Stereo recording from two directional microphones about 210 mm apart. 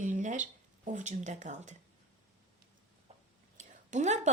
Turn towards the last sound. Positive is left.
turn(degrees=-35)  # may be behind; listen again after turning